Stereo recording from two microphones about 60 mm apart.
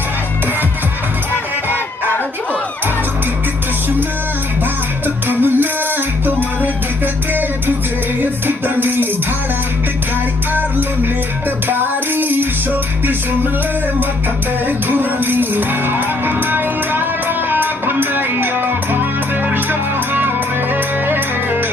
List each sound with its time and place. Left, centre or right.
5.0 s music: right
8.2 s music: right
11.7 s female singing: right
14.9 s music: right
19.5 s music: right